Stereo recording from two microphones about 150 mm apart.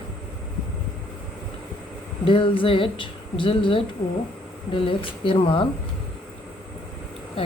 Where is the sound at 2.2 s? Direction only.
35° left (ahead or behind).